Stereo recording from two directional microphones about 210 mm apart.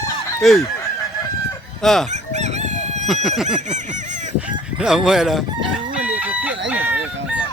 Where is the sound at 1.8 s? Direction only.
Centre (ahead or behind).